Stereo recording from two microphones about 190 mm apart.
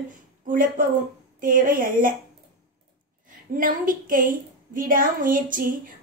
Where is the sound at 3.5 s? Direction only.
45° right (ahead or behind).